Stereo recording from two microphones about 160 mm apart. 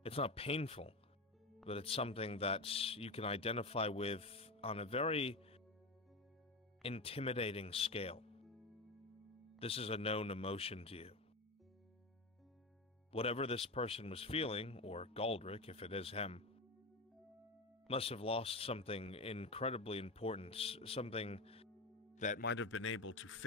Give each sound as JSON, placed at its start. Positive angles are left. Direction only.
{"t": 0.0, "sound": "speech", "side_deg": 35}
{"t": 6.8, "sound": "speech", "side_deg": 35}
{"t": 8.5, "sound": "music", "side_deg": 0}
{"t": 9.6, "sound": "speech", "side_deg": 35}
{"t": 13.1, "sound": "speech", "side_deg": 35}
{"t": 17.8, "sound": "speech", "side_deg": 35}
{"t": 22.1, "sound": "music", "side_deg": 50}